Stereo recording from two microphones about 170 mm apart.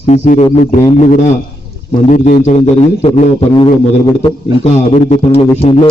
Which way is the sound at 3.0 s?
40° left (ahead or behind).